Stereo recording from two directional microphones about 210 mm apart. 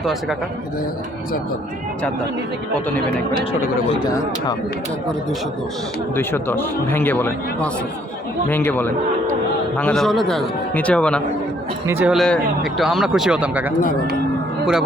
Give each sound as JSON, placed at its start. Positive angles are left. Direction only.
{"t": 0.0, "sound": "speech", "side_deg": 0}
{"t": 3.9, "sound": "speech", "side_deg": 20}
{"t": 6.1, "sound": "a man's voice", "side_deg": 10}
{"t": 11.9, "sound": "speech", "side_deg": -5}